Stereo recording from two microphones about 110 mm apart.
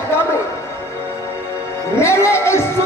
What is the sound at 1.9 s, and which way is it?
Music, 25° left (ahead or behind).